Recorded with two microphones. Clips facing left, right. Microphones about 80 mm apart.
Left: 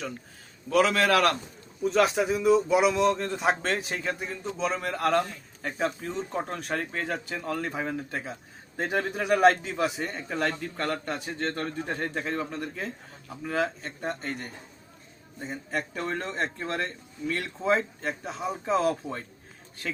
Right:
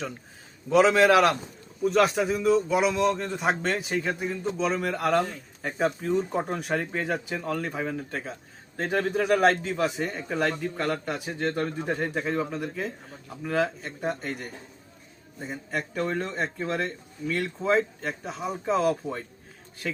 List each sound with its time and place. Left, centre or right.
0.7 s a man's voice: right
1.8 s speech: centre